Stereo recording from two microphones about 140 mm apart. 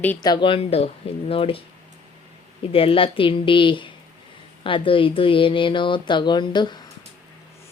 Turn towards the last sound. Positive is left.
turn(degrees=35)  # may be behind; listen again after turning